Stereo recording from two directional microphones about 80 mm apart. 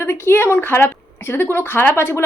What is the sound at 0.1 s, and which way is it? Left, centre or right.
A woman's voice, left.